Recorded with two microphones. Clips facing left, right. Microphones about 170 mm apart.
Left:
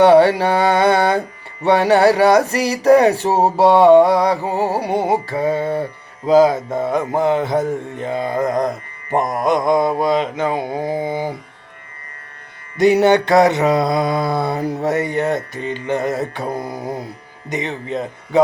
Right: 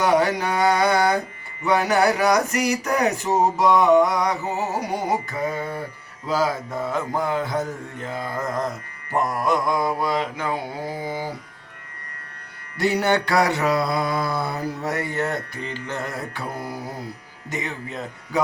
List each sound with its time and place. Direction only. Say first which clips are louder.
0.0 s mantra: left 9 dB; 30° left (ahead or behind)
1.6 s speech: left 7 dB; 30° left (ahead or behind)
6.2 s mantra: left 11 dB; 20° left (ahead or behind)
12.7 s mantra: left 8 dB; 20° left (ahead or behind)